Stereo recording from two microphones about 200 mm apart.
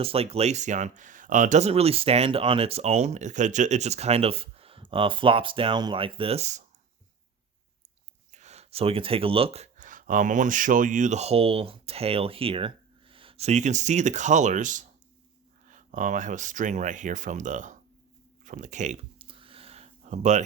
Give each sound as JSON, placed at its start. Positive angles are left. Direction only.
{"t": 0.0, "sound": "speech", "side_deg": -30}
{"t": 8.3, "sound": "speech", "side_deg": -35}
{"t": 19.2, "sound": "a sound", "side_deg": -25}